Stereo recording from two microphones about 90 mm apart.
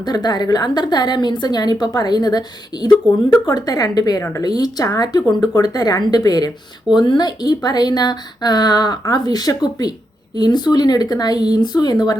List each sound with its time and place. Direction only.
0.0 s speech: 50° left (ahead or behind)
4.2 s speech: 30° left (ahead or behind)
4.4 s speech: 45° left (ahead or behind)
6.9 s speech: 55° left (ahead or behind)